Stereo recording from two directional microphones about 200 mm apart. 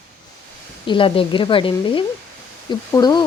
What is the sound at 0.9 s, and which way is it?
Speech, 25° left (ahead or behind).